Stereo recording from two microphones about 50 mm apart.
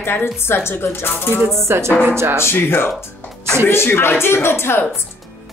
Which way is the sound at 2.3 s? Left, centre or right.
Left.